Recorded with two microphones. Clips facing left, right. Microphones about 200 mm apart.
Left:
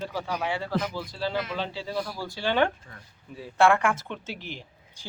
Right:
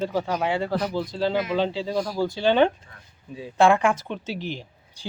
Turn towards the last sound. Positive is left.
turn(degrees=-15)  # may be behind; listen again after turning